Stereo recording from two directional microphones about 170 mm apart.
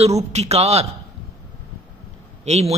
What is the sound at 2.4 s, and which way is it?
Speech, 40° right (ahead or behind).